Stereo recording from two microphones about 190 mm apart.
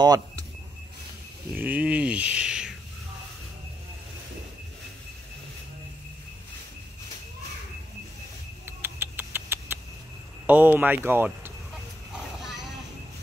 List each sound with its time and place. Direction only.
0.0 s a sound: 20° right (ahead or behind)
1.5 s speech: 10° right (ahead or behind)
8.6 s rodents: 10° right (ahead or behind)
10.4 s speech: 10° right (ahead or behind)
12.4 s vehicle: centre (ahead or behind)